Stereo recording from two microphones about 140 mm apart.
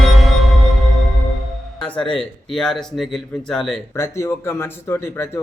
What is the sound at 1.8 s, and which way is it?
Speech, 5° left (ahead or behind).